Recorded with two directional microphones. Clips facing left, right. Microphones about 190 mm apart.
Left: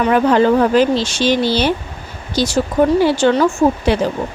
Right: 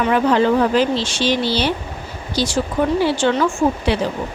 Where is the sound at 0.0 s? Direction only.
45° left (ahead or behind).